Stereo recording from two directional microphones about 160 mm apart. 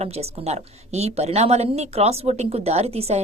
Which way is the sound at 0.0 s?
40° right (ahead or behind).